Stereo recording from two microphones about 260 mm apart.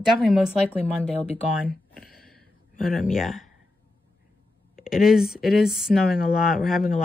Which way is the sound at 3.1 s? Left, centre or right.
Centre.